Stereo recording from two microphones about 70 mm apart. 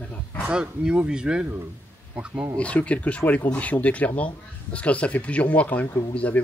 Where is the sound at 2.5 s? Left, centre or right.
Centre.